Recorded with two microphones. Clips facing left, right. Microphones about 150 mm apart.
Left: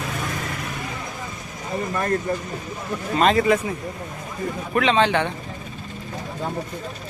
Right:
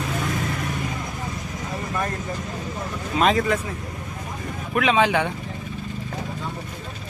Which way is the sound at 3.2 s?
Centre (ahead or behind).